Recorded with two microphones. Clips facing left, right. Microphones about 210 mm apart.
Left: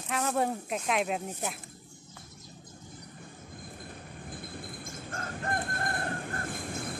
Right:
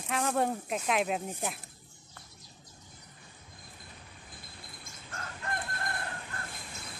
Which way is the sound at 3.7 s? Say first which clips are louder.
Left 8 dB; 55° left (ahead or behind).